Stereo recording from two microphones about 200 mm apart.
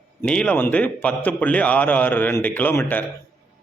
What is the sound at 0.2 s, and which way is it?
A man's voice, 5° left (ahead or behind).